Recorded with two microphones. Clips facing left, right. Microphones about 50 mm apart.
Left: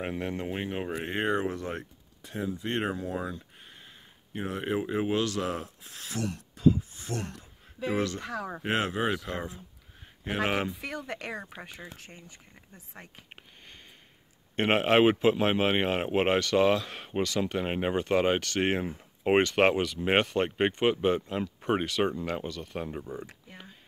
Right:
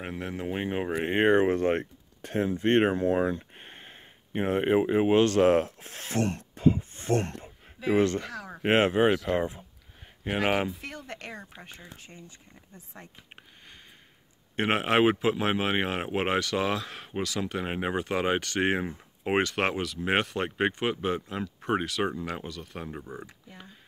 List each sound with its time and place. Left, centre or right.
0.0 s speech: centre
0.7 s speech: centre
1.0 s speech: right
5.2 s speech: right
8.6 s speech: right
10.2 s speech: centre
12.9 s speech: left
14.5 s speech: centre